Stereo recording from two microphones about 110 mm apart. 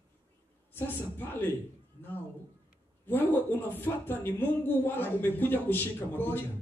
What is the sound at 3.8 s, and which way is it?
Speech, 20° left (ahead or behind).